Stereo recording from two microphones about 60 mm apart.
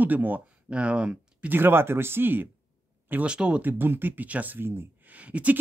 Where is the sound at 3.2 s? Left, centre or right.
Centre.